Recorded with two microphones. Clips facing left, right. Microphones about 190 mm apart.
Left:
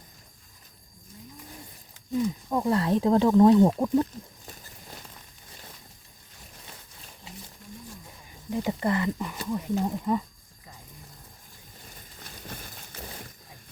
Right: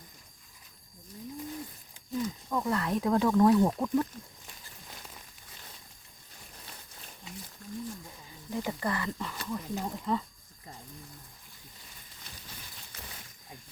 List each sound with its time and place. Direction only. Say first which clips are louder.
2.5 s speech: left 5 dB; 30° left (ahead or behind)
7.6 s wild animals: right 4 dB; 20° left (ahead or behind)
8.4 s speech: left 6 dB; 20° left (ahead or behind)
12.2 s a sound: left 8 dB; 50° left (ahead or behind)